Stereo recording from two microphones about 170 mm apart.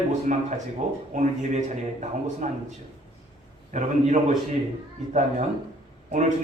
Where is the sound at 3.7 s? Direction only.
45° right (ahead or behind).